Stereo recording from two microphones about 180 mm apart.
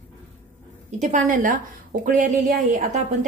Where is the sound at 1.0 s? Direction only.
45° right (ahead or behind).